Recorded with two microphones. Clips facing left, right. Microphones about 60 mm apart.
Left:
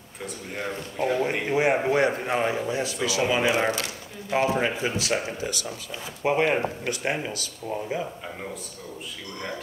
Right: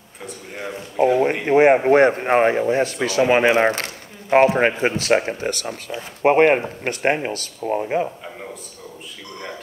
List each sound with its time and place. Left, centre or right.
0.7 s a man's voice: right
1.4 s speech: right